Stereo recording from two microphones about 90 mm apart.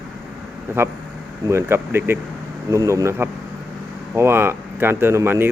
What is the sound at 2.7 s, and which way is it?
Speech, 40° right (ahead or behind).